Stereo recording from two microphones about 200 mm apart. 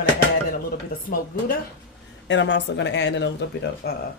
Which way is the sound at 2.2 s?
65° left (ahead or behind).